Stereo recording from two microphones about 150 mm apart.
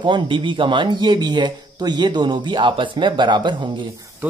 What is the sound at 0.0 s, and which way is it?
Speech, 30° right (ahead or behind).